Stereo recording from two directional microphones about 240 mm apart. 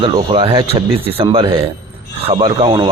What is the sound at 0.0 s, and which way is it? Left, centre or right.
Speech, centre.